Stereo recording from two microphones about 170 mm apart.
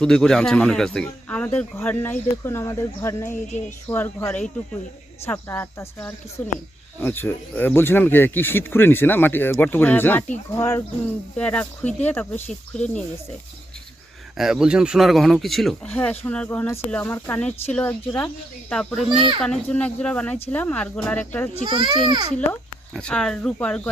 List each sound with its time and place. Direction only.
0.0 s speech: 5° left (ahead or behind)
14.3 s speech: 5° right (ahead or behind)
21.7 s a child's voice: 25° right (ahead or behind)
23.0 s speech: 5° left (ahead or behind)